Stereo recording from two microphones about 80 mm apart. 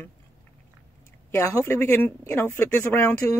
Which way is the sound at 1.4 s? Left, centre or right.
Left.